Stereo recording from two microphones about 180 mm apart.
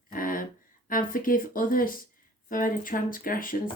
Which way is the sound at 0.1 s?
50° left (ahead or behind).